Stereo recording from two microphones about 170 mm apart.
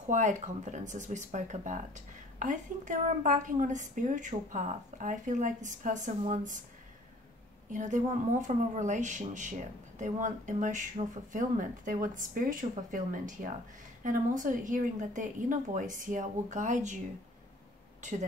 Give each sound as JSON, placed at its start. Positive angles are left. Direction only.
{"t": 0.1, "sound": "speech", "side_deg": -45}
{"t": 7.7, "sound": "speech", "side_deg": -45}